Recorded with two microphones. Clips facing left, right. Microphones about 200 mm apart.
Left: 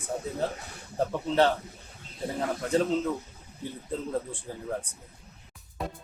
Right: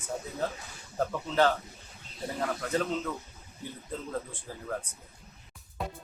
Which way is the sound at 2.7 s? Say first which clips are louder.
Left 7 dB; 30° left (ahead or behind).